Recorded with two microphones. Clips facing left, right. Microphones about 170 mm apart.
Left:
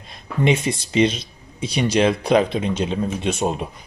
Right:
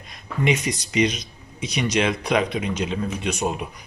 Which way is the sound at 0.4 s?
30° left (ahead or behind).